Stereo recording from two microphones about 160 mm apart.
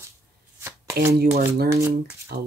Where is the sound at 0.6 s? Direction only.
15° right (ahead or behind).